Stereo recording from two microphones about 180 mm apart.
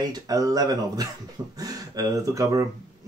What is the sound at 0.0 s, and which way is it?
Speech, 20° right (ahead or behind).